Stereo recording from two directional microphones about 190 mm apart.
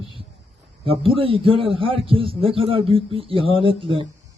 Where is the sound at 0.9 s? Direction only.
30° right (ahead or behind).